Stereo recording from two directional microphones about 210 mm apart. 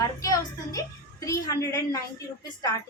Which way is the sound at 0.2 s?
15° left (ahead or behind).